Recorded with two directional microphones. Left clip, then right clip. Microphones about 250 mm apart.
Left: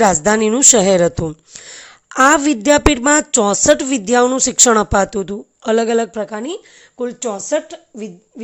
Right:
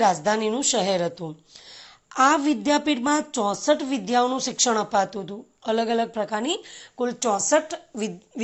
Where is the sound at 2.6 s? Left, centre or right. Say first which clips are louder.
Left 12 dB; left.